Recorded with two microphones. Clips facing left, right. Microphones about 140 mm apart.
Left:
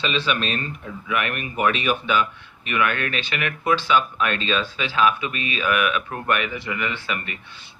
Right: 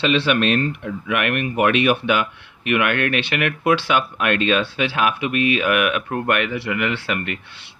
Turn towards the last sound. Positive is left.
turn(degrees=-65)  # may be behind; listen again after turning